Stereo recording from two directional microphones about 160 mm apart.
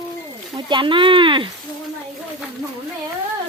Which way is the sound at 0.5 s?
30° right (ahead or behind).